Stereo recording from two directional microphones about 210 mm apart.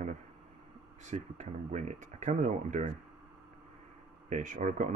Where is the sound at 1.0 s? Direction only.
35° right (ahead or behind).